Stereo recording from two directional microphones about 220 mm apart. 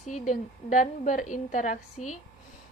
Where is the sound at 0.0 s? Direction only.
35° left (ahead or behind).